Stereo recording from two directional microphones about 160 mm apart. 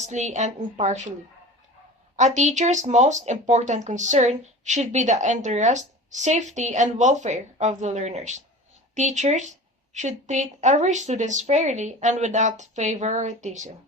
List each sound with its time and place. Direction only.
0.0 s speech: 50° right (ahead or behind)
2.1 s speech: 45° right (ahead or behind)